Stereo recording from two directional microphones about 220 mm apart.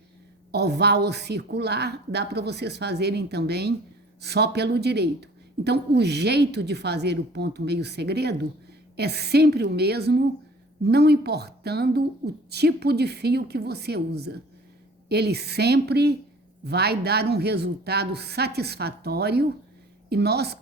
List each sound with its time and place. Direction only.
0.5 s speech: 50° right (ahead or behind)